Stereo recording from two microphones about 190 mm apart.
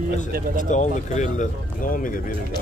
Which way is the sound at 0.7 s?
40° left (ahead or behind).